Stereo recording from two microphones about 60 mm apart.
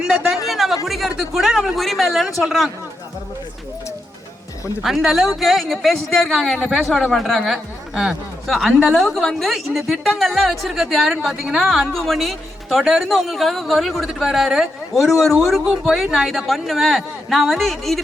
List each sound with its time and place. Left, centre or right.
0.4 s a sound: centre
0.9 s speech: centre
4.8 s speech: centre